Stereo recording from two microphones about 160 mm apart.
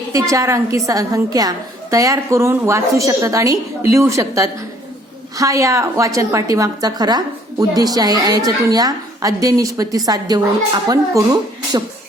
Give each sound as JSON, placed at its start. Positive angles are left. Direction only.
{"t": 0.1, "sound": "a woman's voice", "side_deg": -20}